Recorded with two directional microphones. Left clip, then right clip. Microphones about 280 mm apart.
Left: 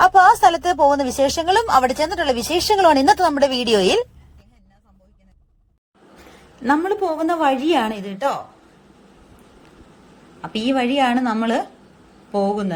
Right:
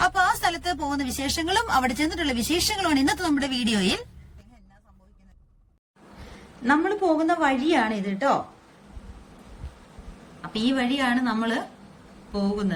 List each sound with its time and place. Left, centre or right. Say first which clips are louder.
0.0 s speech: left 10 dB; centre
6.7 s a woman's voice: left 3 dB; left
10.4 s speech: left 5 dB; centre